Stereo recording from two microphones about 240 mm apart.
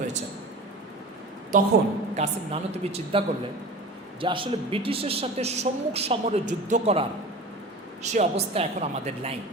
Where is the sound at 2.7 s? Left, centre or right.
Right.